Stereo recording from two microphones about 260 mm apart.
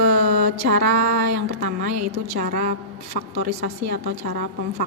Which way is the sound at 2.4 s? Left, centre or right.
Right.